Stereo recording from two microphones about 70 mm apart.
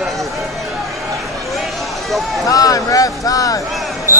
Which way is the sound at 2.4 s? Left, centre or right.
Left.